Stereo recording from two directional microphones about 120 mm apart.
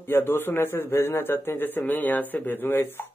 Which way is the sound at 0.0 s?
20° left (ahead or behind).